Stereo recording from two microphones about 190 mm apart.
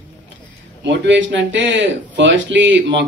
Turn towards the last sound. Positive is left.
turn(degrees=-70)  # may be behind; listen again after turning